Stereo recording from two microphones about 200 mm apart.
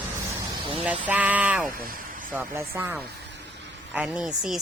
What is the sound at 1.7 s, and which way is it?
Speech, 45° right (ahead or behind).